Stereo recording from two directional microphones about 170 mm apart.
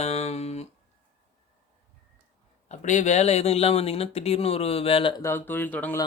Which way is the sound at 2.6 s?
45° left (ahead or behind).